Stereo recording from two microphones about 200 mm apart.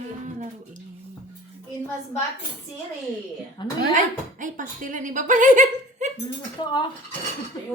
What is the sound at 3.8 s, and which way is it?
Speech, 40° right (ahead or behind).